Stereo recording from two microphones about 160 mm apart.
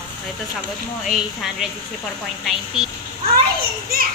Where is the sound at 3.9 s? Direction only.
75° right (ahead or behind).